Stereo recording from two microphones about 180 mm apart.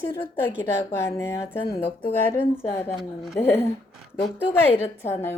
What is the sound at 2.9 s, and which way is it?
Speech, centre (ahead or behind).